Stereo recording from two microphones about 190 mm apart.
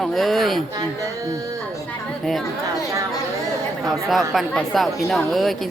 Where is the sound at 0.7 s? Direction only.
20° right (ahead or behind).